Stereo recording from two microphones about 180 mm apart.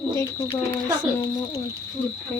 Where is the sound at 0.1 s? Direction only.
15° left (ahead or behind).